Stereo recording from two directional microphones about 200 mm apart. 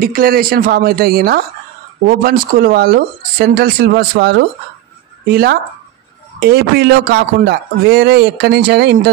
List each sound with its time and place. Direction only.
0.0 s speech: 45° right (ahead or behind)